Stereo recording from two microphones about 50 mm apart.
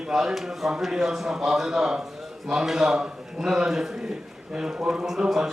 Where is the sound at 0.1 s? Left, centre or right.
Centre.